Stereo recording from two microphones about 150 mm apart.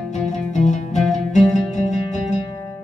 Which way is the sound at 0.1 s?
50° left (ahead or behind).